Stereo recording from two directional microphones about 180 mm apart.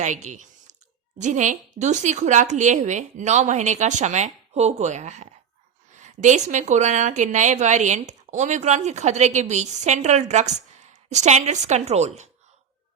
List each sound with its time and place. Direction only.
0.0 s a woman's voice: 40° right (ahead or behind)